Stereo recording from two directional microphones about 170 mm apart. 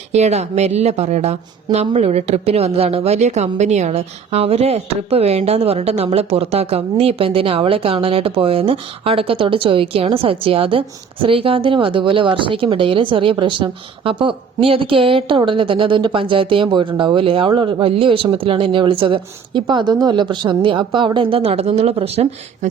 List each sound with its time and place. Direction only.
0.1 s a woman's voice: 40° right (ahead or behind)